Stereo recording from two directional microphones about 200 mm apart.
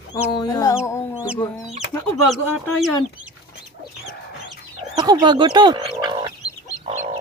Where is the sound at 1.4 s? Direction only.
10° left (ahead or behind).